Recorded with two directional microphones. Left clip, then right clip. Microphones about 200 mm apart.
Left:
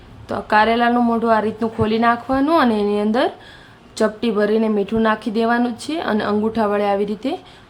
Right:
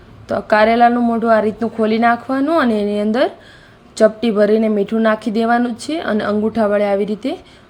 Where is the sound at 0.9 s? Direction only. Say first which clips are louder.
Right 2 dB; centre (ahead or behind).